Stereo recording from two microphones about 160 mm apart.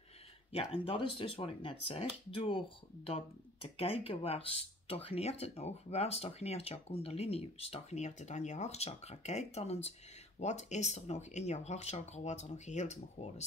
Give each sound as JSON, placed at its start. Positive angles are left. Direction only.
{"t": 0.5, "sound": "speech", "side_deg": 35}